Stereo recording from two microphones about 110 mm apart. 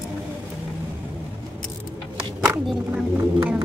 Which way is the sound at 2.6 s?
10° right (ahead or behind).